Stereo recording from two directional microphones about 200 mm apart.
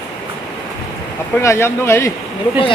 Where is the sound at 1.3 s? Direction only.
10° left (ahead or behind).